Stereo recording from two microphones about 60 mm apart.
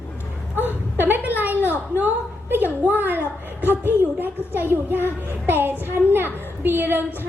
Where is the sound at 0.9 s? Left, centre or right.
Right.